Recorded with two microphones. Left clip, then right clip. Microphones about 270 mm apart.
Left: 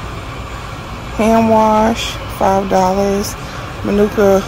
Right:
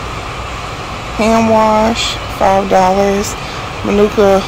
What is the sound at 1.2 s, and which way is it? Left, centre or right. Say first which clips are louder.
Speech: right 1 dB; centre.